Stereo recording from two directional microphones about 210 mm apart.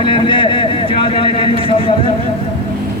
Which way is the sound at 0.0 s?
25° left (ahead or behind).